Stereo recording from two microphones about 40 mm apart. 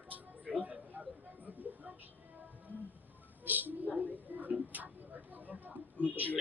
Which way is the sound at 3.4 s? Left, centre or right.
Right.